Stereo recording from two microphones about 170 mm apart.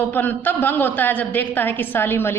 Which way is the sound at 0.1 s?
10° left (ahead or behind).